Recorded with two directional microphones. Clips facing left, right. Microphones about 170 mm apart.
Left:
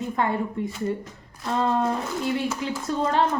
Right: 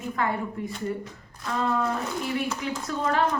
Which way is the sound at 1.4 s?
25° left (ahead or behind).